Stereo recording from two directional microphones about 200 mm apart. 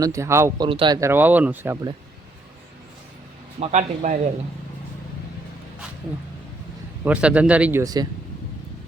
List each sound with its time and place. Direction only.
0.0 s a man's voice: 15° right (ahead or behind)
0.7 s speech: 25° right (ahead or behind)
0.9 s a man's voice: 10° right (ahead or behind)
3.6 s a man's voice: 35° right (ahead or behind)
7.0 s a man's voice: 5° right (ahead or behind)